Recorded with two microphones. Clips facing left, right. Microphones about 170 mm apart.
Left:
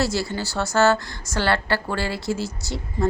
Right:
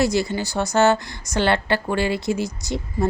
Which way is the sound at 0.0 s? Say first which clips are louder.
Right 4 dB; 15° right (ahead or behind).